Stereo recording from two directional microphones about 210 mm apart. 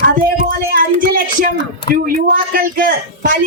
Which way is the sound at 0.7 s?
40° right (ahead or behind).